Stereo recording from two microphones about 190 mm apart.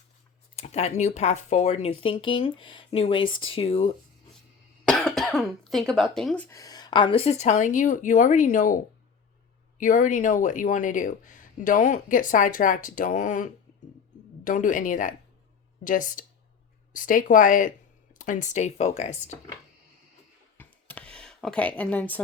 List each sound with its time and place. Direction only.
0.5 s speech: 35° left (ahead or behind)
4.9 s cough: centre (ahead or behind)
5.9 s speech: centre (ahead or behind)
6.6 s speech: 20° left (ahead or behind)
20.6 s a sound: 10° left (ahead or behind)